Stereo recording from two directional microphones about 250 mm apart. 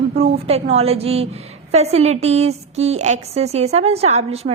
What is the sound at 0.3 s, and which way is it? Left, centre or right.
A woman's voice, right.